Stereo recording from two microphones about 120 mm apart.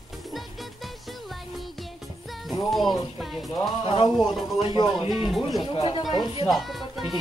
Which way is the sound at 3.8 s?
50° left (ahead or behind).